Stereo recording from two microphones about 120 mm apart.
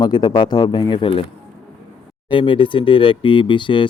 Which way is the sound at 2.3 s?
45° left (ahead or behind).